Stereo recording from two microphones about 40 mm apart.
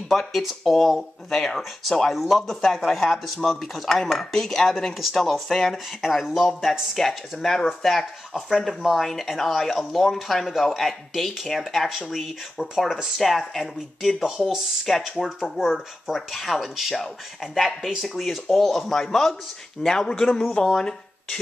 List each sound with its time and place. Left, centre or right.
0.1 s speech: centre
2.4 s chopping: centre
3.4 s speech: centre
4.1 s chopping: centre
4.9 s speech: centre
7.0 s chopping: centre
7.6 s speech: centre
13.5 s speech: centre
15.6 s speech: centre
16.2 s speech: centre
19.8 s chopping: centre
20.1 s a man's voice: left